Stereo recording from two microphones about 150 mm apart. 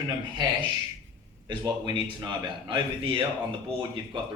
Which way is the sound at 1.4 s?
30° right (ahead or behind).